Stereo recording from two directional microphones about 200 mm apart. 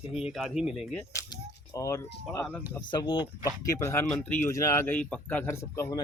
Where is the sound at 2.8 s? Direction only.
25° left (ahead or behind).